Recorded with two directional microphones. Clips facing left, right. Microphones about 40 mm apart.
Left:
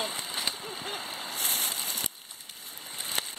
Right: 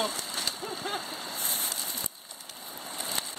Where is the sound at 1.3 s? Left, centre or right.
Left.